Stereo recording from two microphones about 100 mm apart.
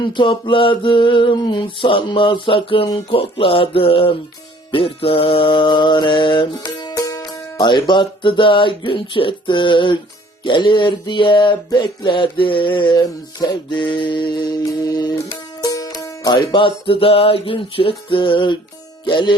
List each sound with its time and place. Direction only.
0.0 s a sound: 55° left (ahead or behind)
4.7 s mantra: 65° left (ahead or behind)
14.6 s music: 35° left (ahead or behind); by 18.5 s 55° left (ahead or behind)
19.0 s mantra: 50° left (ahead or behind)